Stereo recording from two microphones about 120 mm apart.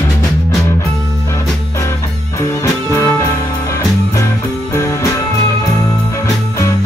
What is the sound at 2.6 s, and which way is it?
Music, 25° left (ahead or behind).